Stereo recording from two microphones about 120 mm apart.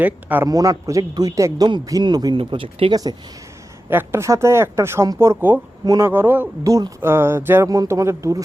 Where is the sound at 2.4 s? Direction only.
50° right (ahead or behind).